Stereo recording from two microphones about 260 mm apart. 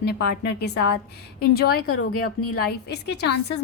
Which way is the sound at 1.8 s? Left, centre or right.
Left.